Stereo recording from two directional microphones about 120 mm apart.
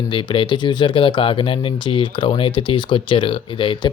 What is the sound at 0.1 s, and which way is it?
Speech, 40° left (ahead or behind).